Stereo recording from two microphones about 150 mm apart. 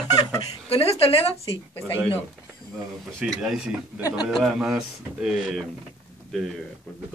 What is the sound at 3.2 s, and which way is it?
Speech, 5° right (ahead or behind).